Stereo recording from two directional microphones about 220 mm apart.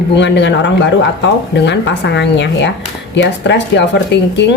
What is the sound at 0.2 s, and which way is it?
A woman's voice, 55° left (ahead or behind).